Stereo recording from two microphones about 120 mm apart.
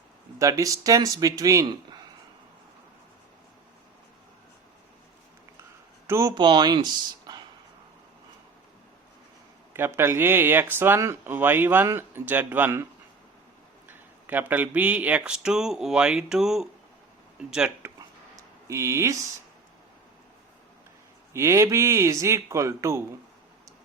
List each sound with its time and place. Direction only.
0.3 s speech: 25° right (ahead or behind)
6.1 s speech: 20° right (ahead or behind)
6.3 s speech: 40° right (ahead or behind)
9.7 s speech: 20° right (ahead or behind)
18.7 s speech: 25° right (ahead or behind)
21.3 s speech: 25° right (ahead or behind)